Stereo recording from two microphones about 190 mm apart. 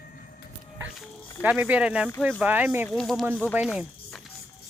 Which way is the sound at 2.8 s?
Centre (ahead or behind).